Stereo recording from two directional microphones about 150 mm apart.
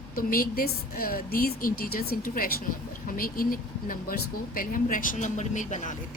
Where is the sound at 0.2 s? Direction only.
70° left (ahead or behind); by 5.9 s 55° left (ahead or behind).